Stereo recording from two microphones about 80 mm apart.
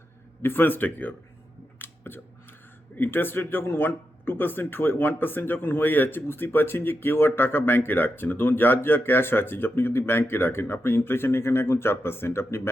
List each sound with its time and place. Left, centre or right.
0.4 s speech: left